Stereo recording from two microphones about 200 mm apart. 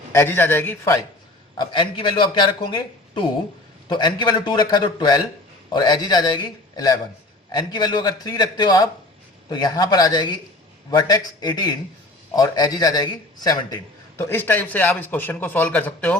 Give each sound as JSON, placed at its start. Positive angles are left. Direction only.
{"t": 0.1, "sound": "a man's voice", "side_deg": 10}
{"t": 1.5, "sound": "speech", "side_deg": 25}
{"t": 3.8, "sound": "a man's voice", "side_deg": 20}